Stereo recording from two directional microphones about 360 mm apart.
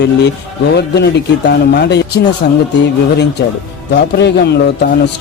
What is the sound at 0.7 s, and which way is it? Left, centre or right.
A man's voice, left.